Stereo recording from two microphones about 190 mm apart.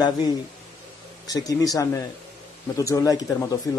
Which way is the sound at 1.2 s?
20° left (ahead or behind).